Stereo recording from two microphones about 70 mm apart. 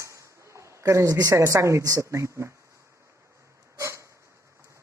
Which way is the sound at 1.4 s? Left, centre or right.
Right.